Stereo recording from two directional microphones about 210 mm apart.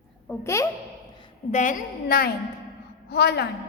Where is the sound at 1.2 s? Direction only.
35° left (ahead or behind); by 3.4 s 50° left (ahead or behind).